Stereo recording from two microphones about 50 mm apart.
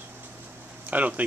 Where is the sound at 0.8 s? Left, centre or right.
Right.